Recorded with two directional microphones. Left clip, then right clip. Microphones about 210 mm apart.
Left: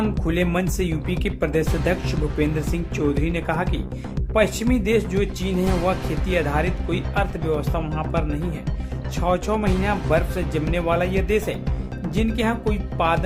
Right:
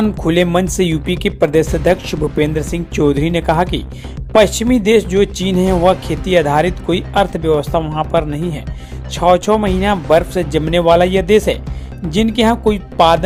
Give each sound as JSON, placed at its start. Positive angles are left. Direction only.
{"t": 0.3, "sound": "speech", "side_deg": -35}